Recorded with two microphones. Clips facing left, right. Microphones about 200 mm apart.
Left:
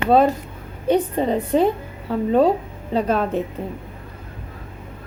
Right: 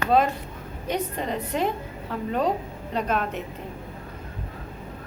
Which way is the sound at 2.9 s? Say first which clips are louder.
Left 7 dB; 30° left (ahead or behind).